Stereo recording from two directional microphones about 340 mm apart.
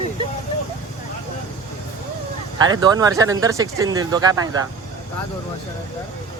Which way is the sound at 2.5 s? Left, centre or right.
Centre.